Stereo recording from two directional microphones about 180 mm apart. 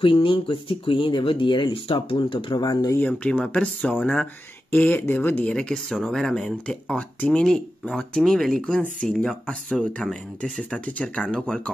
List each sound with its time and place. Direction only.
0.0 s speech: 30° left (ahead or behind)
3.0 s speech: 5° left (ahead or behind)